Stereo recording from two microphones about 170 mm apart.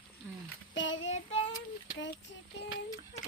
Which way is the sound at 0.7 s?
90° left.